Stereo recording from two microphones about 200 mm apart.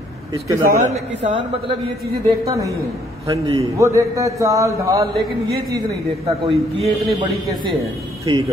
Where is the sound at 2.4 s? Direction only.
15° right (ahead or behind).